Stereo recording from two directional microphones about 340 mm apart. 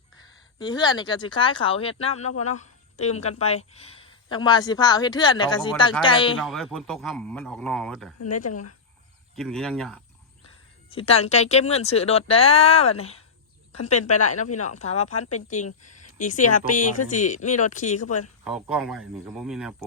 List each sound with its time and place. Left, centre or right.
0.6 s a woman's voice: centre
6.4 s speech: centre
8.4 s speech: left
9.3 s speech: centre
10.8 s a woman's voice: centre
14.4 s speech: left
14.7 s speech: centre
18.4 s speech: centre